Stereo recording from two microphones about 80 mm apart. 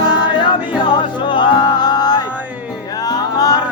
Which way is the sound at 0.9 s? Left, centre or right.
Left.